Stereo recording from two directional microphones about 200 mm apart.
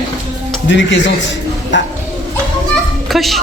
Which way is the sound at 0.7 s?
65° left (ahead or behind).